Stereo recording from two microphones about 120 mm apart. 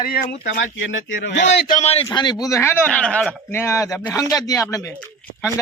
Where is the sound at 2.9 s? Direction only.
10° left (ahead or behind).